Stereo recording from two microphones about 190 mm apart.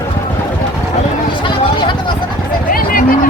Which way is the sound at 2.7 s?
50° left (ahead or behind).